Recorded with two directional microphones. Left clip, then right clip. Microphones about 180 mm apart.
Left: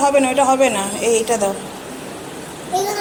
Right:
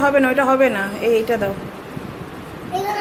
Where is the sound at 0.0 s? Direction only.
20° right (ahead or behind).